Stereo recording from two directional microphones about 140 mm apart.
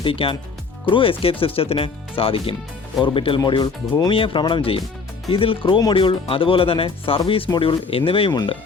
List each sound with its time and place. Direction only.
0.0 s speech: 40° left (ahead or behind)